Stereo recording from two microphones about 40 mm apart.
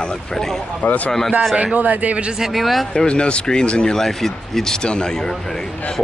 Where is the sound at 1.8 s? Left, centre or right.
Right.